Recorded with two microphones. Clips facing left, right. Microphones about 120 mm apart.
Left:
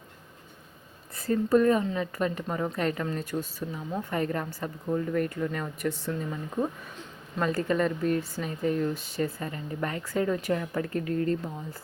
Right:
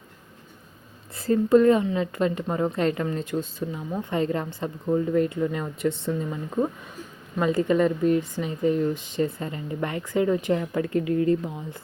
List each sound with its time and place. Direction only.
1.1 s speech: 30° right (ahead or behind)
7.3 s speech: 15° right (ahead or behind)